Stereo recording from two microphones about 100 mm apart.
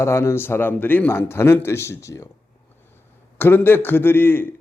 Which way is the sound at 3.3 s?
20° left (ahead or behind).